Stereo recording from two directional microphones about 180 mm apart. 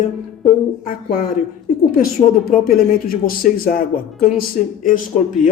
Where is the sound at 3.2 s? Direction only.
55° left (ahead or behind).